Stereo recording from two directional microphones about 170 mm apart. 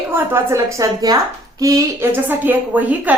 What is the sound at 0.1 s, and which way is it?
A woman's voice, 15° right (ahead or behind).